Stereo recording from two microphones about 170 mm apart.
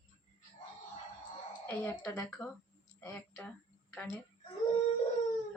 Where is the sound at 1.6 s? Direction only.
10° left (ahead or behind).